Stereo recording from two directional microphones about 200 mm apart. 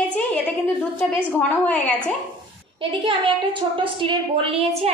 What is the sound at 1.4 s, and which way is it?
Speech, 5° left (ahead or behind).